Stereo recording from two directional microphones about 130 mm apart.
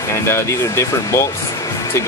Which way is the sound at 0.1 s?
25° left (ahead or behind).